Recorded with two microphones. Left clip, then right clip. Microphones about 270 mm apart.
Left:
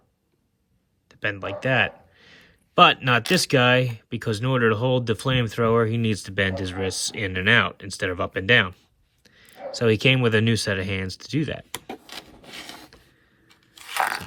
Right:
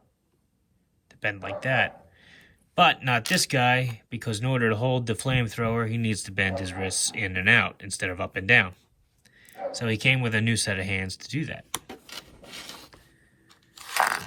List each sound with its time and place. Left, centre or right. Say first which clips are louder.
1.0 s speech: left 2 dB; centre
12.0 s pulleys: left 2 dB; centre
13.7 s crunch: even; centre